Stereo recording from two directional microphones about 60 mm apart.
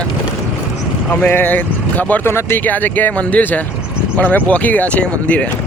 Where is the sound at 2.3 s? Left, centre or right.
Left.